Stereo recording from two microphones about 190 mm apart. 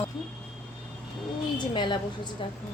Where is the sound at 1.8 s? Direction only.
25° left (ahead or behind).